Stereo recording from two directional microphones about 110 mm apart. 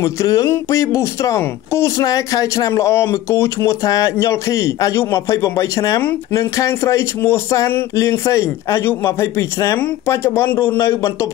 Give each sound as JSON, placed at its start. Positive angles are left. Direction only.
{"t": 0.0, "sound": "speech", "side_deg": 30}